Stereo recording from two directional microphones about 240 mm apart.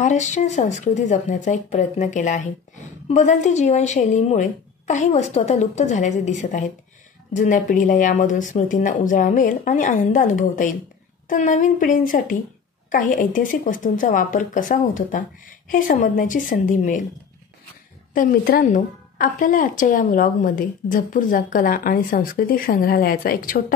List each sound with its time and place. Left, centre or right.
0.0 s a woman's voice: left
18.1 s a woman's voice: left